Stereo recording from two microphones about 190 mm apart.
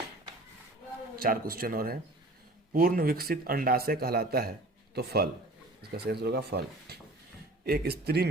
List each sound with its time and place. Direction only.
1.1 s speech: 50° right (ahead or behind)